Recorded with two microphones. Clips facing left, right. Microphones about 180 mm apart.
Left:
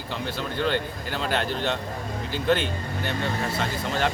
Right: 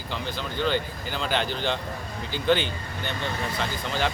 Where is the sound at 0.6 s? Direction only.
Centre (ahead or behind).